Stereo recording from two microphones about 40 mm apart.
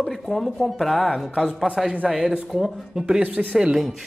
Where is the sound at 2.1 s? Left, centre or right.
Centre.